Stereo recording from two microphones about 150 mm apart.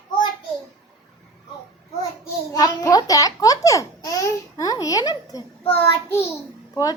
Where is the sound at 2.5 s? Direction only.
25° left (ahead or behind).